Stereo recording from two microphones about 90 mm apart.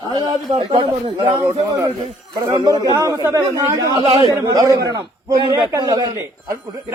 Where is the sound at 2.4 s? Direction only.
55° right (ahead or behind).